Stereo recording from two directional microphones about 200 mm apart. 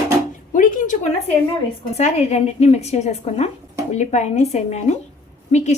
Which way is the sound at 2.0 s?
35° left (ahead or behind).